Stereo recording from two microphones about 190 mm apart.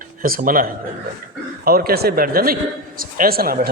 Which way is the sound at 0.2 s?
45° right (ahead or behind).